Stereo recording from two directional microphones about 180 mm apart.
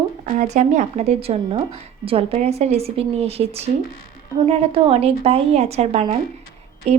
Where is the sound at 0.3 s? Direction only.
40° right (ahead or behind).